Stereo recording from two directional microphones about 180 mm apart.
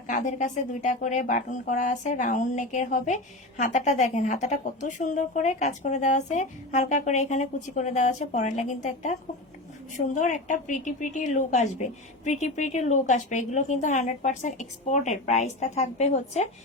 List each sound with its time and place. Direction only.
0.1 s a woman's voice: 45° left (ahead or behind)